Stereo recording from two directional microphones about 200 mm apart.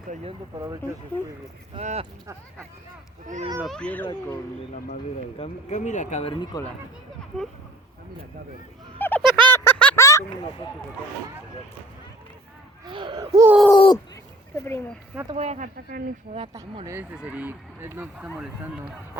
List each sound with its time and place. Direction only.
1.1 s speech: 10° left (ahead or behind)
1.7 s speech: 30° right (ahead or behind)
3.6 s speech: 5° left (ahead or behind)
5.4 s speech: 35° left (ahead or behind)
6.4 s speech: 20° left (ahead or behind)
7.3 s speech: centre (ahead or behind)
9.0 s a sound: 10° left (ahead or behind)
12.8 s speech: 25° right (ahead or behind)
13.7 s speech: 25° left (ahead or behind)
14.5 s speech: 15° left (ahead or behind)
15.4 s speech: 35° right (ahead or behind)
16.6 s speech: 15° right (ahead or behind)